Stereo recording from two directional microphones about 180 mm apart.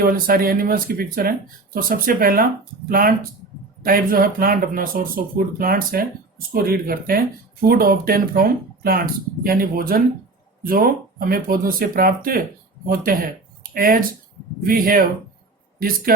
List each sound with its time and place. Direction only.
0.0 s speech: 55° right (ahead or behind)
16.1 s speech: 55° right (ahead or behind)